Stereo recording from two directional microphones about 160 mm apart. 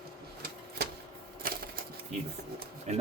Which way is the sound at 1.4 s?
65° right (ahead or behind).